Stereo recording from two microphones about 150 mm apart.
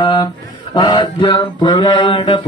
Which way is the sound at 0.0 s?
35° left (ahead or behind).